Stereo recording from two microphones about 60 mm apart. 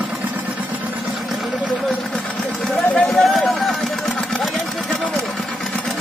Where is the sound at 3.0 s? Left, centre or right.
Centre.